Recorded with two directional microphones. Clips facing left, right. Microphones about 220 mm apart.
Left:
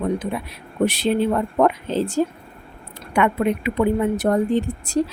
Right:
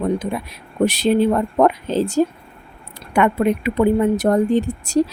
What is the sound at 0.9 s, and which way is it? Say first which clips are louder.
A woman's voice: right 4 dB; 40° right (ahead or behind).